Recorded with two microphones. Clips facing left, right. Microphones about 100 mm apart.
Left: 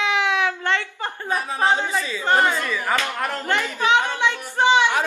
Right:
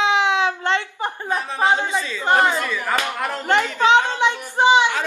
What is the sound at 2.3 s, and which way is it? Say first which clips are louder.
Speech: right 2 dB; 20° right (ahead or behind).